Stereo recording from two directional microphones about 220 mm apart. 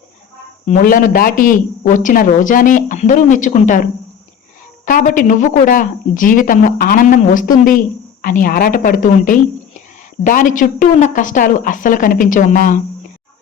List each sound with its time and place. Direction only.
0.7 s a woman's voice: 35° left (ahead or behind)
4.9 s a woman's voice: 35° left (ahead or behind)